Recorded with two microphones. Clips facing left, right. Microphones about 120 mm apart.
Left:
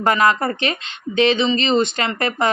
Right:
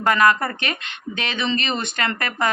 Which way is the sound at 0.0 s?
25° left (ahead or behind).